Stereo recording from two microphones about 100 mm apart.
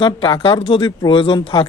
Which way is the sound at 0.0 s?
55° left (ahead or behind).